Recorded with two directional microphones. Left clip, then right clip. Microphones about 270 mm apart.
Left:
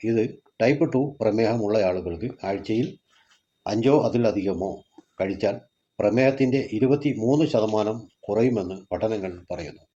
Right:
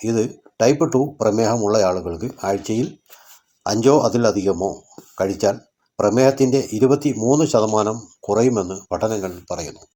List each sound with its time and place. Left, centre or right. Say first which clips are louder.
0.1 s speech: right 3 dB; right